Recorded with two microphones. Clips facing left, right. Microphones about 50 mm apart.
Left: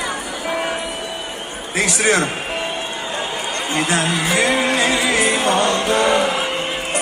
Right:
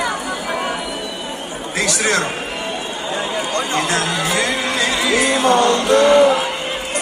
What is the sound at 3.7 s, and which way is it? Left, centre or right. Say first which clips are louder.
Music: left 3 dB; centre.